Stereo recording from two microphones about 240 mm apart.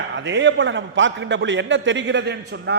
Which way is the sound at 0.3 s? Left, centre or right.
Right.